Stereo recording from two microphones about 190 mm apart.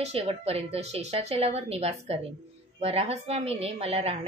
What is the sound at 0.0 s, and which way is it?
Speech, 35° right (ahead or behind).